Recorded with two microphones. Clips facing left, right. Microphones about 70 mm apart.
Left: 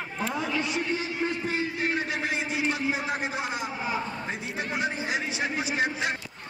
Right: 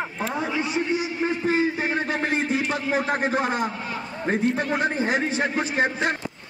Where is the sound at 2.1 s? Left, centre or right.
Right.